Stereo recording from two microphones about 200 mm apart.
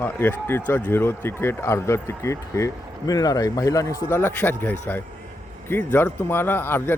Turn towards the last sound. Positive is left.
turn(degrees=10)  # may be behind; listen again after turning